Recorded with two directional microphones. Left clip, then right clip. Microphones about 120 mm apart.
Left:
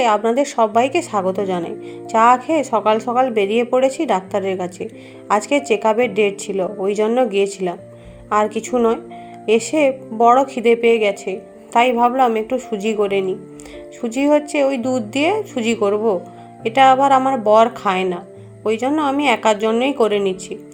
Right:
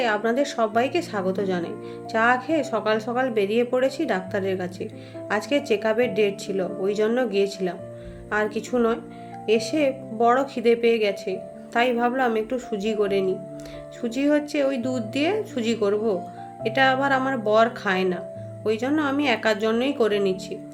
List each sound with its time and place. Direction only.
0.0 s a woman's voice: 30° left (ahead or behind)
14.3 s a woman's voice: 30° left (ahead or behind)